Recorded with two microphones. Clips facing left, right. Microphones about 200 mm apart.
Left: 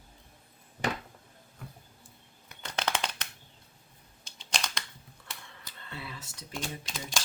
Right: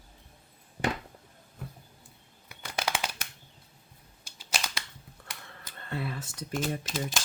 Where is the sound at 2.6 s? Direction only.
10° right (ahead or behind).